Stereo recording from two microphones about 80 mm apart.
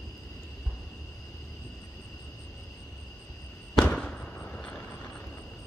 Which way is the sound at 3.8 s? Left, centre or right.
Centre.